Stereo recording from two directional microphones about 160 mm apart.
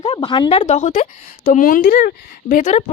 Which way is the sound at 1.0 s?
55° left (ahead or behind).